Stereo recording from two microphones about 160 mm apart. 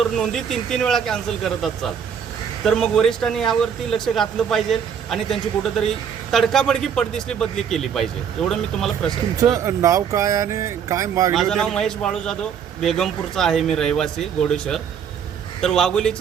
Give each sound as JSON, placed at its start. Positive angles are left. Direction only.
{"t": 0.0, "sound": "a man's voice", "side_deg": 0}
{"t": 9.4, "sound": "speech", "side_deg": -20}
{"t": 11.3, "sound": "a man's voice", "side_deg": 0}